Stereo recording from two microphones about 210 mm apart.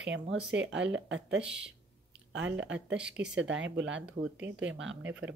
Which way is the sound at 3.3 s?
60° right (ahead or behind).